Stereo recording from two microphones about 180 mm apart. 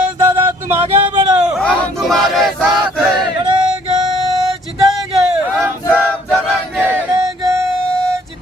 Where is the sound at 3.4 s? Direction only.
25° right (ahead or behind).